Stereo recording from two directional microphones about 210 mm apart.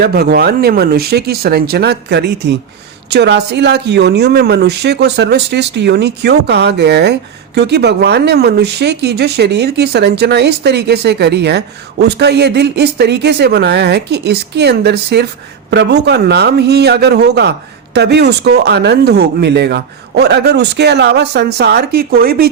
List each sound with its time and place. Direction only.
0.0 s speech: 50° right (ahead or behind)